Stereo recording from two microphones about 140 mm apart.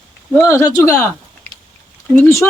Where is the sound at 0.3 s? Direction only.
20° left (ahead or behind).